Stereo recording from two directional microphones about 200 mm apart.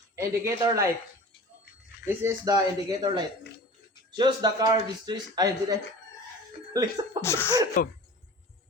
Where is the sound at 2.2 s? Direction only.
15° right (ahead or behind).